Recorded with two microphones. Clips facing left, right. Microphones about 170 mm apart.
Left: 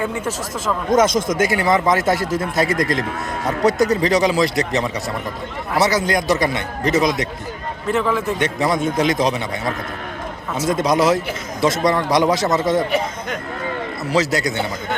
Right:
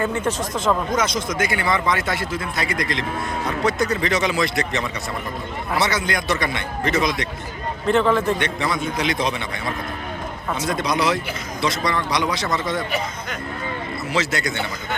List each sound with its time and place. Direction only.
0.0 s speech: 10° left (ahead or behind)
0.9 s speech: 45° left (ahead or behind)
5.8 s speech: 40° left (ahead or behind)
7.9 s speech: 5° left (ahead or behind)
8.4 s speech: 45° left (ahead or behind)
10.7 s speech: 45° left (ahead or behind)
14.1 s speech: 40° left (ahead or behind)